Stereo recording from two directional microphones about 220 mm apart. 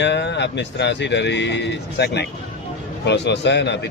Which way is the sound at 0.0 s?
50° left (ahead or behind).